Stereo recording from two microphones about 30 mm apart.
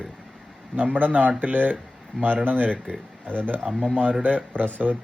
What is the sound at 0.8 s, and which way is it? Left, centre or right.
Speech, right.